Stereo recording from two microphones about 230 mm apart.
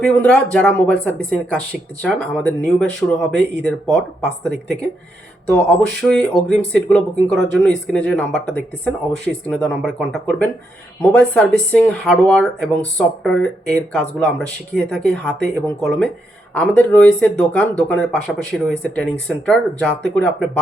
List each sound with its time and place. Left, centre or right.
0.0 s speech: centre
4.4 s speech: centre